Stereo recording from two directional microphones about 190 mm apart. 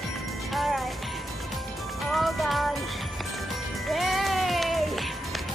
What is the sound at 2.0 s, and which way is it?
Music, centre (ahead or behind).